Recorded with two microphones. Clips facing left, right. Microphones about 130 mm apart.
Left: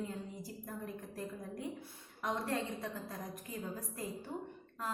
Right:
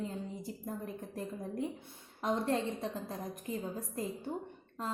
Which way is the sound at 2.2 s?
25° right (ahead or behind).